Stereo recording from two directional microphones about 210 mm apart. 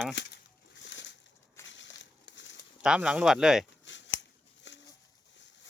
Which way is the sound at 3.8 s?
60° left (ahead or behind).